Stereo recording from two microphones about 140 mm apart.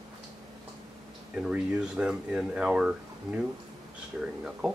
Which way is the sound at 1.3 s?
5° right (ahead or behind).